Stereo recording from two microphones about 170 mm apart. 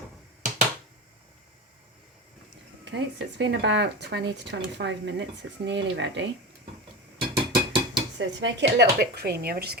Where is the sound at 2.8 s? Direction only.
90° right.